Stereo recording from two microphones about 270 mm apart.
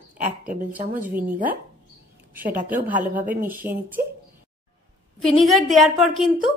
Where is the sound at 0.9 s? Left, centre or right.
Right.